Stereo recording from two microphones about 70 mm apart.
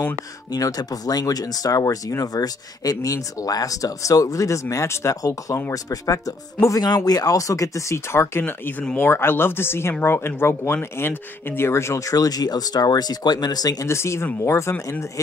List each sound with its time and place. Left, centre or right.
0.5 s speech: left
6.7 s speech: left
7.1 s speech: left
8.5 s speech: left
13.8 s speech: left